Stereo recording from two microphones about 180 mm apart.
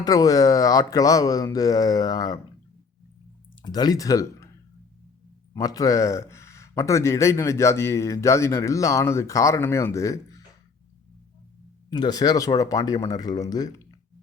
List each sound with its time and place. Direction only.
0.0 s speech: 20° left (ahead or behind)
3.6 s speech: 20° left (ahead or behind)
5.5 s speech: 20° left (ahead or behind)
11.9 s speech: 25° left (ahead or behind)